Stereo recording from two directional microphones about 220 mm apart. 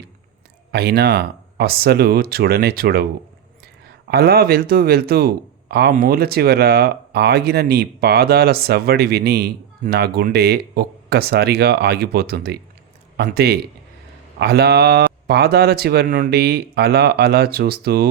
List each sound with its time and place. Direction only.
0.7 s speech: 45° right (ahead or behind)